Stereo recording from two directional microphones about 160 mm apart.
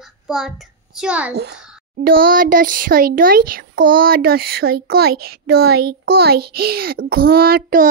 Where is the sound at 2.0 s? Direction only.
65° right (ahead or behind).